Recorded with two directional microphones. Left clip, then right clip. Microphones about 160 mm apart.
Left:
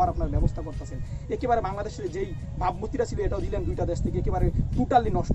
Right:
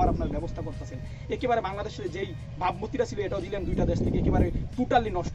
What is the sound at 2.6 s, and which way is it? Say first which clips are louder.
Speech: left 1 dB; 15° left (ahead or behind).